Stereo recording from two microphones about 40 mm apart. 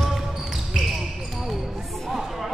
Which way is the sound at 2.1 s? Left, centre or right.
Centre.